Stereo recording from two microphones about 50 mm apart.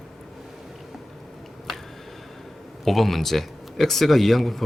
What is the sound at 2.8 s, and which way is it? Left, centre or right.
Speech, centre.